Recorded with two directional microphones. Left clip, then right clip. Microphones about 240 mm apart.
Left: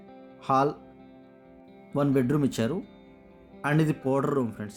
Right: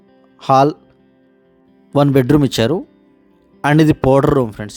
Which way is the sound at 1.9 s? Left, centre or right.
Right.